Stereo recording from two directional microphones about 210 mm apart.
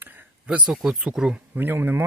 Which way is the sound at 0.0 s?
10° right (ahead or behind).